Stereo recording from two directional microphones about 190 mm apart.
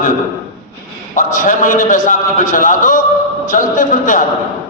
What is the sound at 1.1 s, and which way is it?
A man's voice, 45° left (ahead or behind).